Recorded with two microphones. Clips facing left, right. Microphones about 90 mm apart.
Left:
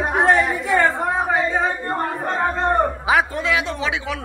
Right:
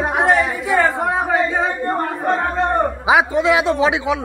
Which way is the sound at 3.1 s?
15° right (ahead or behind).